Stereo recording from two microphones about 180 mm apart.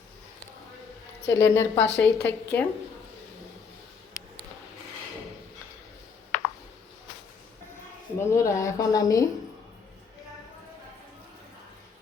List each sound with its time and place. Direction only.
1.3 s a woman's voice: 15° left (ahead or behind)
8.2 s a woman's voice: 15° left (ahead or behind)